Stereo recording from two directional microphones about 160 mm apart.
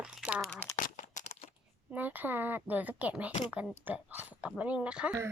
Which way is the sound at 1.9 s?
10° right (ahead or behind).